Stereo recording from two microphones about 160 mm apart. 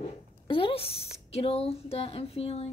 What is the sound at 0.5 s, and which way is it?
Speech, 35° left (ahead or behind).